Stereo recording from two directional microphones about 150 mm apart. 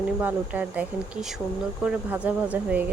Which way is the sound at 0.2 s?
10° right (ahead or behind).